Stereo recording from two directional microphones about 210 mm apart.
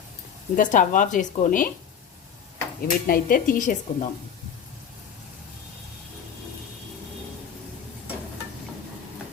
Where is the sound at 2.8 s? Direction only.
40° left (ahead or behind).